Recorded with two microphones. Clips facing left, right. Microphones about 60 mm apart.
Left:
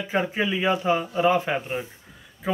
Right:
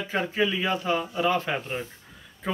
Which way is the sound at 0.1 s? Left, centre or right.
Centre.